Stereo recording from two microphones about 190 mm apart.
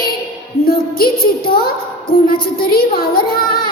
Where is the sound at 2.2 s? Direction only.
50° left (ahead or behind).